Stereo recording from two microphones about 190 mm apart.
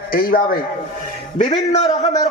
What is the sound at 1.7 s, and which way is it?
Speech, 35° left (ahead or behind).